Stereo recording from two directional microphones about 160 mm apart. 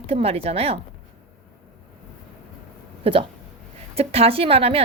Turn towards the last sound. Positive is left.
turn(degrees=-35)  # may be behind; listen again after turning